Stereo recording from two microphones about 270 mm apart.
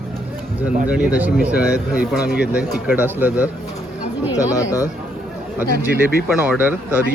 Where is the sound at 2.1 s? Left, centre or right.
Left.